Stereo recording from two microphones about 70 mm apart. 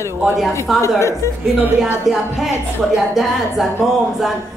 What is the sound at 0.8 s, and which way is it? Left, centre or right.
Speech, left.